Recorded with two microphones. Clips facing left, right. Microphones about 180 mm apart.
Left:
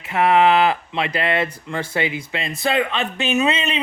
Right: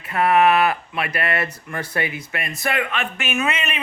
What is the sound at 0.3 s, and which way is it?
A man's voice, 25° left (ahead or behind).